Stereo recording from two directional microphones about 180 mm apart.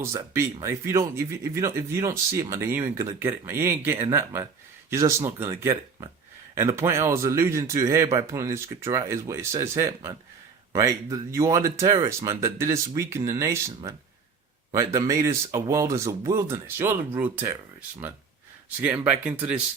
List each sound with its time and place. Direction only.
0.0 s speech: 15° right (ahead or behind)
18.8 s speech: 10° right (ahead or behind)